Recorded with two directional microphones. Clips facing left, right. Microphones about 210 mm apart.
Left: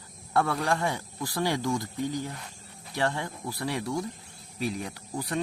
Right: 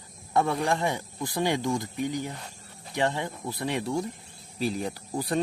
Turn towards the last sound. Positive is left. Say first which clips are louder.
# right 3 dB
turn(degrees=-35)  # may be behind; listen again after turning